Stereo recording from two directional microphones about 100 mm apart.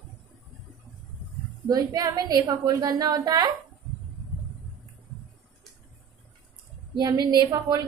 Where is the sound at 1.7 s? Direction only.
40° right (ahead or behind).